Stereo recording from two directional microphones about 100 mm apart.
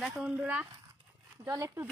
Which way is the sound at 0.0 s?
15° right (ahead or behind).